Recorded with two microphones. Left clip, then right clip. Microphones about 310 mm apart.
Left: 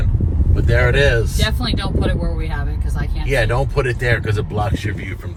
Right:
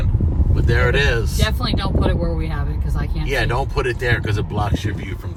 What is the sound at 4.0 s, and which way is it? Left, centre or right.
Speech, centre.